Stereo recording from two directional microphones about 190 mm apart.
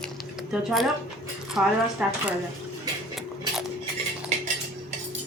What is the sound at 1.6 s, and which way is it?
Speech, 5° right (ahead or behind).